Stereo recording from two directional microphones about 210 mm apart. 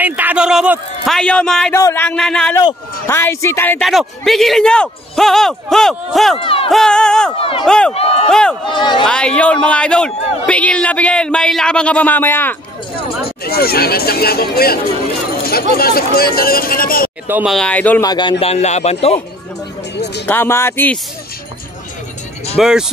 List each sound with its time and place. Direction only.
0.0 s a man's voice: 10° right (ahead or behind)
6.3 s speech: 25° left (ahead or behind)
6.7 s speech: 5° left (ahead or behind)
7.9 s speech: 30° left (ahead or behind)
8.3 s speech: 5° left (ahead or behind)
8.6 s speech: 20° left (ahead or behind)
9.0 s speech: 5° left (ahead or behind)
13.4 s speech: 45° left (ahead or behind)
17.3 s speech: 5° right (ahead or behind)
18.0 s speech: 20° left (ahead or behind)
18.4 s speech: 30° left (ahead or behind)
20.2 s a man's voice: 10° left (ahead or behind)
22.6 s speech: 5° right (ahead or behind)